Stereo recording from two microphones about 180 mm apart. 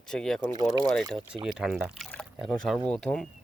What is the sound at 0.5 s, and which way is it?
Speech, 20° right (ahead or behind).